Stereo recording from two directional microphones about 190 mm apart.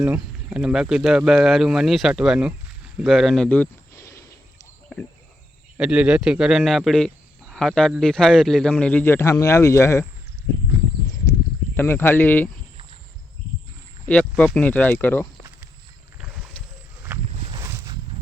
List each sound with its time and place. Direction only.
0.0 s speech: 5° right (ahead or behind); by 4.2 s 15° left (ahead or behind)
5.7 s speech: 5° right (ahead or behind); by 10.1 s 15° left (ahead or behind)
11.7 s speech: 10° left (ahead or behind)
14.1 s speech: 5° left (ahead or behind)
17.6 s a sound: 15° right (ahead or behind)